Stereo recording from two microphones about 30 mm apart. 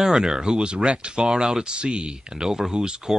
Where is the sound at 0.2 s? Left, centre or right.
Right.